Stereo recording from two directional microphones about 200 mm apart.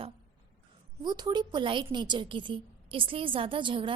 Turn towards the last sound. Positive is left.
turn(degrees=-25)  # may be behind; listen again after turning